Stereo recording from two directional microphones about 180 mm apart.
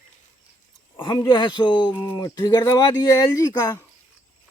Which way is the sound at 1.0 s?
25° left (ahead or behind).